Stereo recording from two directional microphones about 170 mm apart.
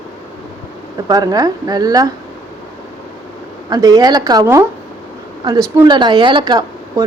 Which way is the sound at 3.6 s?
20° right (ahead or behind).